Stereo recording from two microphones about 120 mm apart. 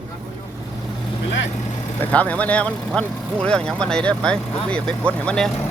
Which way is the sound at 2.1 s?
10° left (ahead or behind).